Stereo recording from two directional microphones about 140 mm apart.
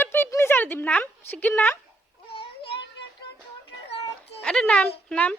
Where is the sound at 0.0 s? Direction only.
15° left (ahead or behind).